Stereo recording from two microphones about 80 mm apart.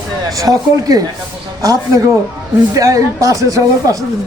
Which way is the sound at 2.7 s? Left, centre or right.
Right.